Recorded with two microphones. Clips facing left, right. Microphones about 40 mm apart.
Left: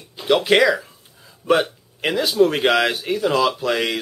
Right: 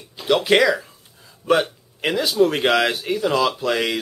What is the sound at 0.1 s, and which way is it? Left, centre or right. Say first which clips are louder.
Speech: left 1 dB; centre.